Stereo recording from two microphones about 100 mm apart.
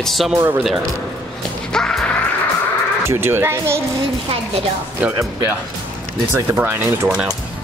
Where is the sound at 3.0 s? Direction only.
25° right (ahead or behind).